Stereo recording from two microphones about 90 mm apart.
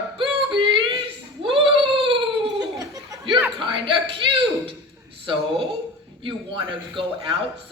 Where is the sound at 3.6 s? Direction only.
70° right (ahead or behind).